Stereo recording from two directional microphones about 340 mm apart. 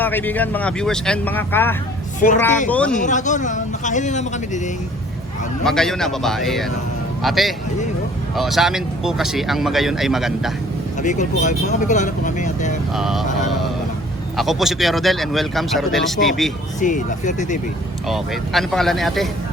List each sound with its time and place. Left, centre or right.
0.0 s speech: centre
2.2 s speech: left
2.6 s speech: centre
2.9 s speech: left
5.6 s speech: centre
11.0 s speech: left
13.0 s speech: centre
14.3 s speech: centre
16.8 s speech: left
18.1 s speech: centre